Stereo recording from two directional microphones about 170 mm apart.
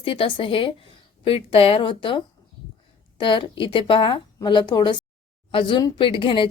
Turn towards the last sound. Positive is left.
turn(degrees=30)  # may be behind; listen again after turning